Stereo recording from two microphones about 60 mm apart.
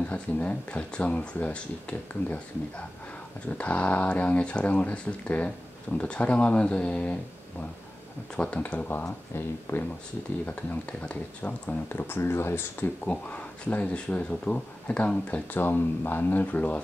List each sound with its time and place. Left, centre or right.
0.1 s speech: left
3.4 s speech: left
8.4 s speech: left
9.3 s speech: left
10.4 s speech: left
11.9 s speech: left
13.0 s speech: left